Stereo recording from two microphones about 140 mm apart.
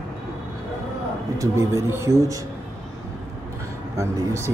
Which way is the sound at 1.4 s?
20° right (ahead or behind).